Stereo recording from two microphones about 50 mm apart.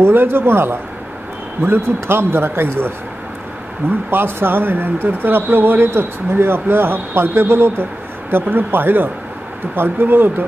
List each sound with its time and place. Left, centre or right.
0.0 s speech: right
4.1 s speech: right